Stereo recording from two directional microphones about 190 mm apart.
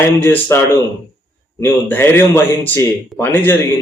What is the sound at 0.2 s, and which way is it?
A man's voice, 10° left (ahead or behind).